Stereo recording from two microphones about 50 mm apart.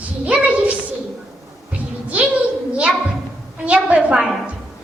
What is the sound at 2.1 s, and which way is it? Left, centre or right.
Speech, right.